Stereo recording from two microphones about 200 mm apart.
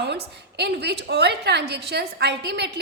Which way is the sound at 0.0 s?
55° right (ahead or behind).